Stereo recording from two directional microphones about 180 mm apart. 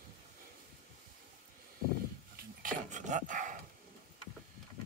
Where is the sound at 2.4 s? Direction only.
45° right (ahead or behind).